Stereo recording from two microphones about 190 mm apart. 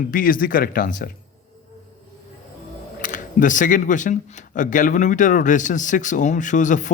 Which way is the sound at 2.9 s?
45° left (ahead or behind).